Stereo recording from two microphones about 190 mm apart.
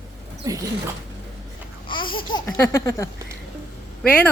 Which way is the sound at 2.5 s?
15° left (ahead or behind).